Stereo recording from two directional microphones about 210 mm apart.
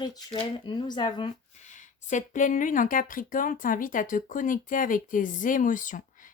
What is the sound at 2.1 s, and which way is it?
Speech, 35° left (ahead or behind).